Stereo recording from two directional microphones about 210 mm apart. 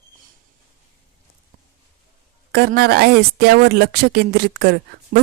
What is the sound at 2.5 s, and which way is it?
Speech, 50° right (ahead or behind).